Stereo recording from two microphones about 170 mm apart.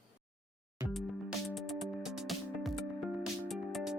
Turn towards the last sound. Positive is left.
turn(degrees=0)  # may be behind; listen again after turning